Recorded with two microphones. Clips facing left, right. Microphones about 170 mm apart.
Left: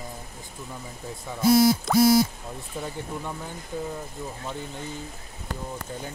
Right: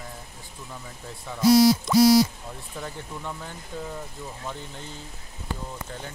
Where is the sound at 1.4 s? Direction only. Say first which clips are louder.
Right 2 dB; 50° left (ahead or behind).